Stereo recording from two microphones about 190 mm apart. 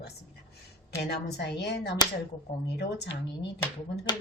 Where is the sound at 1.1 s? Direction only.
60° left (ahead or behind).